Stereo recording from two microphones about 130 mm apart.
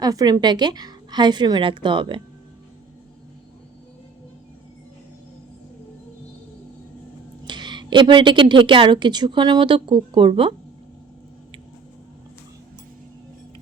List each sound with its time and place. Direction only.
0.0 s speech: 30° right (ahead or behind)
7.4 s speech: 35° right (ahead or behind)